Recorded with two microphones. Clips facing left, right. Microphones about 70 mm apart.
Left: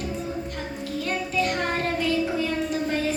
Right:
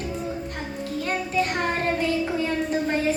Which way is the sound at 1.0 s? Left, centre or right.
Right.